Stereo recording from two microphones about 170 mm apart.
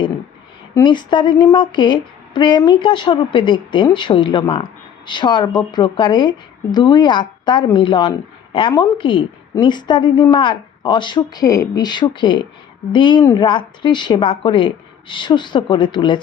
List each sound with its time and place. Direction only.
0.7 s a woman's voice: 25° left (ahead or behind)